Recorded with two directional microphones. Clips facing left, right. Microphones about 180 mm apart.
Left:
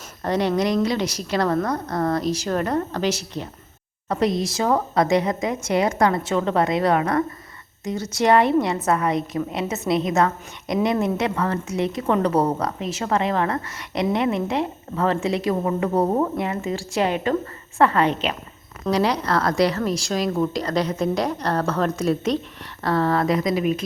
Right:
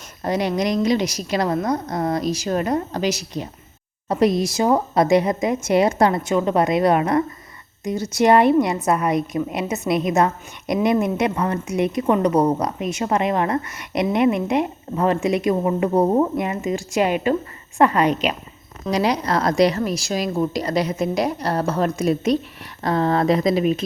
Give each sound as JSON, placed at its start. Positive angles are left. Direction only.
{"t": 0.2, "sound": "a woman's voice", "side_deg": -10}
{"t": 4.2, "sound": "speech", "side_deg": 25}
{"t": 4.5, "sound": "a woman's voice", "side_deg": -20}